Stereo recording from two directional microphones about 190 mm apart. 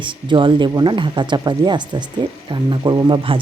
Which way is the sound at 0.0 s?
25° right (ahead or behind).